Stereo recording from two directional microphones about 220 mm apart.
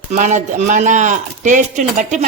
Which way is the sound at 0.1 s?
35° right (ahead or behind).